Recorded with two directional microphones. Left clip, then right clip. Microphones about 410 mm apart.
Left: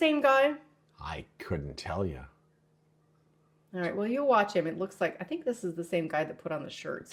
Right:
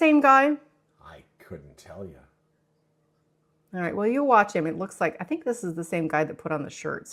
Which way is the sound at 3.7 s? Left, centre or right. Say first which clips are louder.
Right 6 dB; right.